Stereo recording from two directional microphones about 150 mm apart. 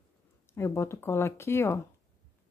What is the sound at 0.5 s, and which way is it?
Speech, 20° left (ahead or behind).